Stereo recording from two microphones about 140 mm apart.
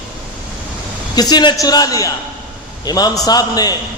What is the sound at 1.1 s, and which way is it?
A man's voice, 30° left (ahead or behind).